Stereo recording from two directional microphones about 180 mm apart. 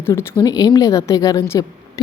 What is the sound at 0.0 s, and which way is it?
A woman's voice, 15° left (ahead or behind).